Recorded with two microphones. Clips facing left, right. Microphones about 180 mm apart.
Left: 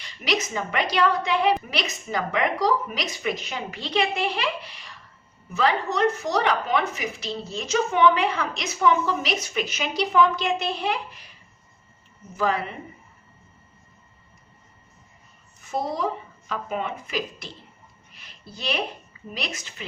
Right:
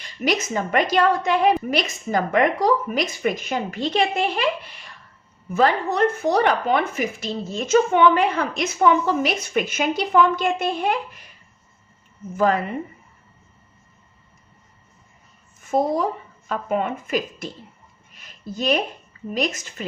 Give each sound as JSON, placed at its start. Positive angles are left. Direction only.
{"t": 0.0, "sound": "speech", "side_deg": -45}
{"t": 12.4, "sound": "speech", "side_deg": -45}
{"t": 15.7, "sound": "speech", "side_deg": -50}
{"t": 18.1, "sound": "a sound", "side_deg": -45}
{"t": 19.3, "sound": "speech", "side_deg": -45}